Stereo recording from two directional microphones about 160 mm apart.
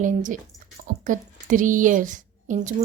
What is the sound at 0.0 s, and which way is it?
Speech, 55° right (ahead or behind).